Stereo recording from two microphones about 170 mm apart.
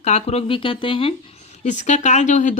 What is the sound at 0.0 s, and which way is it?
Speech, 40° left (ahead or behind).